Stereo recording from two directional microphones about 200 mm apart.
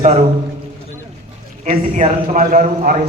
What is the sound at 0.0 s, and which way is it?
Speech, 35° right (ahead or behind).